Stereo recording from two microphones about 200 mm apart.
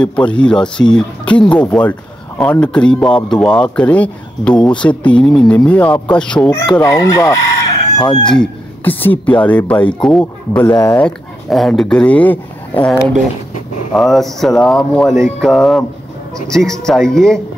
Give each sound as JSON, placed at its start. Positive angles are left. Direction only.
{"t": 0.0, "sound": "speech", "side_deg": 5}
{"t": 8.0, "sound": "crowing", "side_deg": 25}
{"t": 8.4, "sound": "speech", "side_deg": 10}
{"t": 10.7, "sound": "crowing", "side_deg": 20}
{"t": 11.0, "sound": "speech", "side_deg": 5}